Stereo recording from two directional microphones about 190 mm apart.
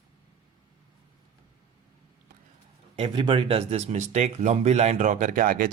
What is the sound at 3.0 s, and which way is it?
Speech, 25° right (ahead or behind).